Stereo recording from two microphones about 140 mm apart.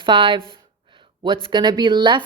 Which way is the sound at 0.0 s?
35° right (ahead or behind).